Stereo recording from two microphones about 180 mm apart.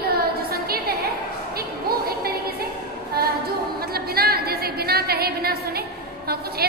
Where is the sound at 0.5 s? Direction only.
60° right (ahead or behind).